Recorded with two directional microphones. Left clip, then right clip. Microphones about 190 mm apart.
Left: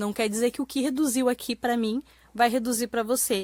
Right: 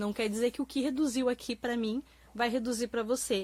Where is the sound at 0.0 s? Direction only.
40° left (ahead or behind).